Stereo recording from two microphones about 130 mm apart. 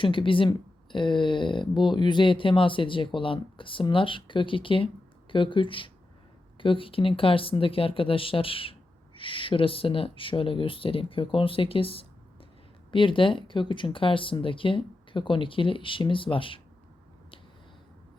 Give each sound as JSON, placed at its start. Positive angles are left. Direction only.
{"t": 0.0, "sound": "speech", "side_deg": 40}